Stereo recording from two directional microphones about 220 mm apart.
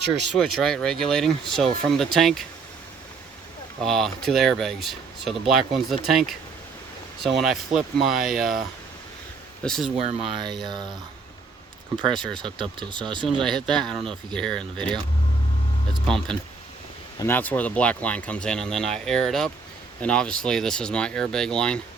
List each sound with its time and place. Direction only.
0.1 s speech: centre (ahead or behind)
3.8 s speech: centre (ahead or behind)
7.3 s speech: centre (ahead or behind)
9.6 s speech: centre (ahead or behind)
10.7 s speech: 20° right (ahead or behind)
12.0 s speech: centre (ahead or behind)
13.0 s speech: 20° right (ahead or behind)
13.4 s speech: centre (ahead or behind)
16.0 s speech: 5° left (ahead or behind)